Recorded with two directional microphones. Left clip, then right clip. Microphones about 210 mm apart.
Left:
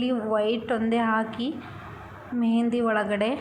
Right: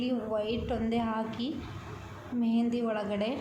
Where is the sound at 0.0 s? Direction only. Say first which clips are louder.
Left 7 dB; 15° left (ahead or behind).